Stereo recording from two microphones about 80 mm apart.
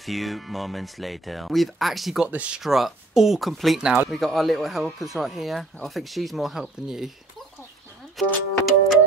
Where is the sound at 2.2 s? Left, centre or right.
Centre.